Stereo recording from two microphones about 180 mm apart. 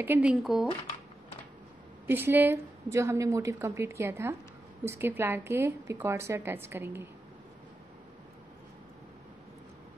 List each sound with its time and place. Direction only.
0.0 s speech: 10° right (ahead or behind)
2.0 s a woman's voice: 10° right (ahead or behind)